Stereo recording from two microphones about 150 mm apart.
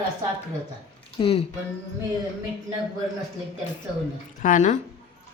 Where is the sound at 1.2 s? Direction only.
40° left (ahead or behind).